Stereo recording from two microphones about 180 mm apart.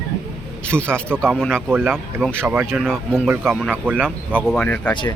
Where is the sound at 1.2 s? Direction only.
5° left (ahead or behind).